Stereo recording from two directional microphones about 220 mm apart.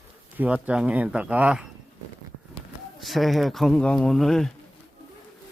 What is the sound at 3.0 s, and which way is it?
A man's voice, centre (ahead or behind).